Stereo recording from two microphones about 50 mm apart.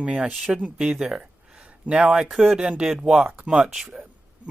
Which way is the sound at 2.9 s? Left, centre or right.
Centre.